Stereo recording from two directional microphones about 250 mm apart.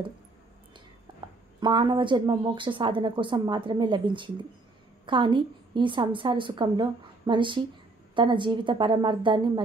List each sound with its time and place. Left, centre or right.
1.6 s a woman's voice: centre